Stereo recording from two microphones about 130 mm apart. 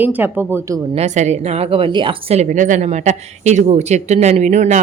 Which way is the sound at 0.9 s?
60° right (ahead or behind).